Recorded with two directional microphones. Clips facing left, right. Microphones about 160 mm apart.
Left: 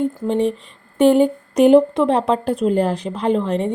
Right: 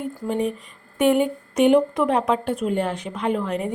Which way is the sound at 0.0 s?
30° left (ahead or behind).